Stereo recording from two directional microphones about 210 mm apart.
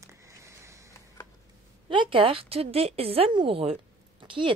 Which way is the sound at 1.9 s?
25° right (ahead or behind).